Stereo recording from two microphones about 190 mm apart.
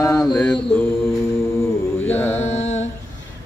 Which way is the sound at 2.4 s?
35° left (ahead or behind).